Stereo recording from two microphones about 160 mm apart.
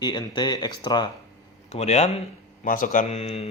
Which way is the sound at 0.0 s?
25° left (ahead or behind).